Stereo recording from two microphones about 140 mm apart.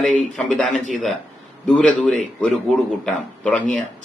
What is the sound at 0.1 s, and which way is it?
Speech, 5° left (ahead or behind).